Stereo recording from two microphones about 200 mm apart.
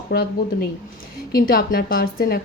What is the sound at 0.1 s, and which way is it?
Speech, 55° left (ahead or behind).